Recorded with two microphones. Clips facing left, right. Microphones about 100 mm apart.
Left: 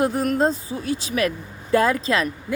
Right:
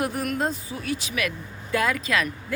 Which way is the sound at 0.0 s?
25° left (ahead or behind).